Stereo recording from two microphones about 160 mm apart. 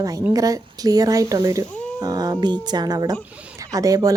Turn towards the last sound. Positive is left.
turn(degrees=-20)  # may be behind; listen again after turning